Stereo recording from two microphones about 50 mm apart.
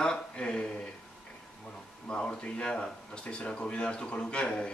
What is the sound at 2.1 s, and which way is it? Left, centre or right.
Speech, centre.